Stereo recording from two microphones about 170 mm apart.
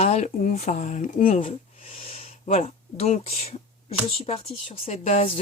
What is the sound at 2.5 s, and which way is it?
Speech, 35° left (ahead or behind).